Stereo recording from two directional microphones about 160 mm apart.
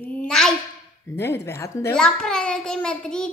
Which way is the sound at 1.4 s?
20° left (ahead or behind).